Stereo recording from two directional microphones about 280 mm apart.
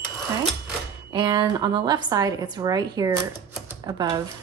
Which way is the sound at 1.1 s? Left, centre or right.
Centre.